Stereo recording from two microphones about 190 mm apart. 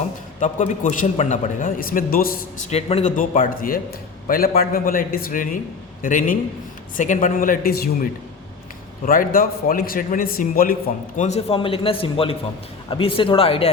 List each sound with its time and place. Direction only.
0.3 s a man's voice: 40° left (ahead or behind)
2.6 s a man's voice: 35° left (ahead or behind); by 7.9 s 50° left (ahead or behind)
9.0 s a man's voice: 50° left (ahead or behind)
10.8 s a man's voice: 35° left (ahead or behind)